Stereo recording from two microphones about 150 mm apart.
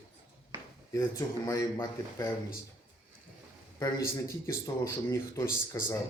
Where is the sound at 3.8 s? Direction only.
20° left (ahead or behind).